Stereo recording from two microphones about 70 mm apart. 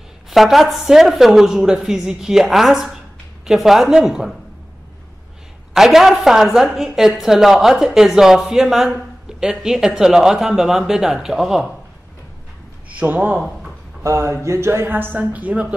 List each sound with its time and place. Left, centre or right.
0.3 s a woman's voice: centre
5.7 s a woman's voice: centre
13.0 s a man's voice: right
14.0 s speech: right